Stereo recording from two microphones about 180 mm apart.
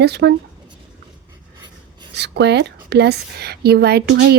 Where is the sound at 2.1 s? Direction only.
70° right (ahead or behind).